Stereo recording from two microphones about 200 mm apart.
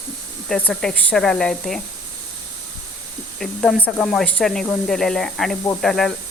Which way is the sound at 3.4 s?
Centre (ahead or behind).